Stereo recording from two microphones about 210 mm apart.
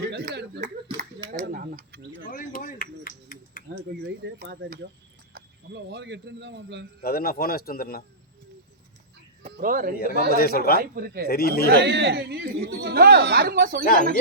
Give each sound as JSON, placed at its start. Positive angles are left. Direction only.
{"t": 0.0, "sound": "a sound", "side_deg": -50}
{"t": 1.3, "sound": "tick-tock", "side_deg": -45}
{"t": 2.3, "sound": "a sound", "side_deg": 40}
{"t": 3.9, "sound": "a sound", "side_deg": -60}
{"t": 4.4, "sound": "speech", "side_deg": -45}
{"t": 7.0, "sound": "a man's voice", "side_deg": 45}
{"t": 9.5, "sound": "speech", "side_deg": -45}
{"t": 10.0, "sound": "a man's voice", "side_deg": 45}
{"t": 10.9, "sound": "speech", "side_deg": -45}
{"t": 11.3, "sound": "a man's voice", "side_deg": 45}
{"t": 11.8, "sound": "speech", "side_deg": -55}
{"t": 13.8, "sound": "a man's voice", "side_deg": 40}